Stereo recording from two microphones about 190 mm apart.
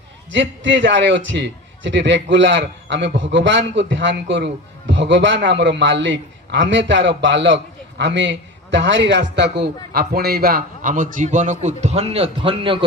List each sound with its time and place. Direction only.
0.3 s a man's voice: 70° right (ahead or behind); by 12.8 s 25° right (ahead or behind)